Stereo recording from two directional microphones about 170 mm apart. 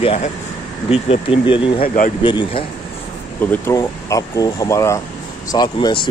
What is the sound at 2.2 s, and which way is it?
Speech, 25° left (ahead or behind).